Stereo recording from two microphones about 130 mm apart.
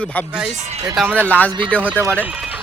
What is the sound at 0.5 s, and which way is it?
Speech, 60° right (ahead or behind).